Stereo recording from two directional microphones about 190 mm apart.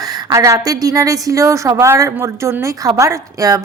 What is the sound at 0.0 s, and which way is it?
A woman's voice, 20° right (ahead or behind).